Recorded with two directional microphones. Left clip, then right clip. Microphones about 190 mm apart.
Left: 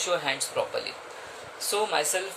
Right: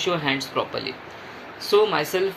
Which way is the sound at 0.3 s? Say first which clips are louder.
Right 4 dB; 15° left (ahead or behind).